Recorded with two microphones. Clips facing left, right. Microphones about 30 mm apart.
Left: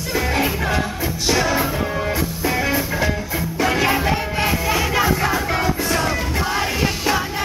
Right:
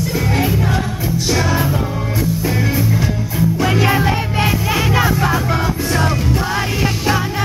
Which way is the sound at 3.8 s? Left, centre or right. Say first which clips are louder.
Right 3 dB; centre.